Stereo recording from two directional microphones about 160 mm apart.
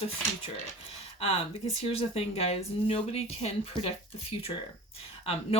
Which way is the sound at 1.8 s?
40° left (ahead or behind).